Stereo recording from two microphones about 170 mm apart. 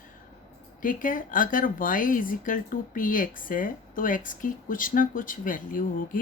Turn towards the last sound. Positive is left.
turn(degrees=55)  # may be behind; listen again after turning